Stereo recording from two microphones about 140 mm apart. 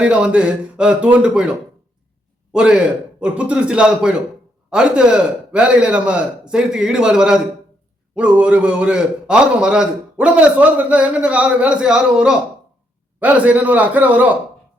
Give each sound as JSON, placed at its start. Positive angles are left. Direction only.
{"t": 0.0, "sound": "a man's voice", "side_deg": -10}
{"t": 2.5, "sound": "a man's voice", "side_deg": -5}